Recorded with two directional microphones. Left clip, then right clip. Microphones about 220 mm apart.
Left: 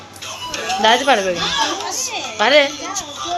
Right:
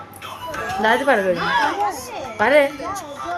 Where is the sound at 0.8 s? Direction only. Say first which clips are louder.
Left 3 dB; 10° right (ahead or behind).